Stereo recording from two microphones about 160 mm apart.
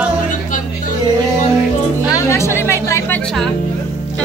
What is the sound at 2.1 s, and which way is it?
A woman's voice, 20° left (ahead or behind).